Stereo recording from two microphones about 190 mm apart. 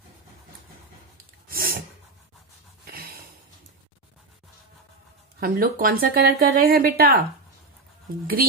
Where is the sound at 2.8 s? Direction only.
50° right (ahead or behind).